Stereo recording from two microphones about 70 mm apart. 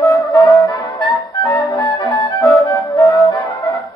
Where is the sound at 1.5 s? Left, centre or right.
Left.